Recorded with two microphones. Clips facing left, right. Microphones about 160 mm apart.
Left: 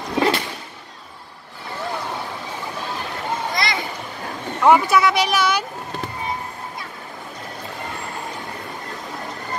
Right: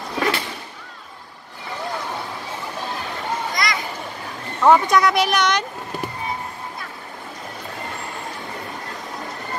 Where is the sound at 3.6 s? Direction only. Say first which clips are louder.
Left 1 dB; 25° left (ahead or behind).